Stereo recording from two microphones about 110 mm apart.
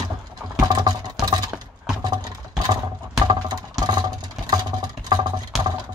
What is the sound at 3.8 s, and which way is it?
Vehicle, 35° right (ahead or behind).